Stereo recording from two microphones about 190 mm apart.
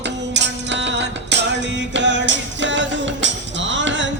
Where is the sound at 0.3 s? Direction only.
70° right (ahead or behind).